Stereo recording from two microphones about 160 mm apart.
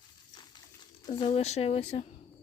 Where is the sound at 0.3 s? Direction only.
25° left (ahead or behind).